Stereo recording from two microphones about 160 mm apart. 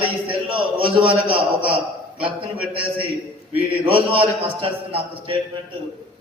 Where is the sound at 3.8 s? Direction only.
35° right (ahead or behind).